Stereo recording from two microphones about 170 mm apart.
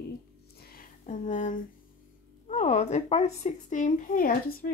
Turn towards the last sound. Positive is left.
turn(degrees=55)  # may be behind; listen again after turning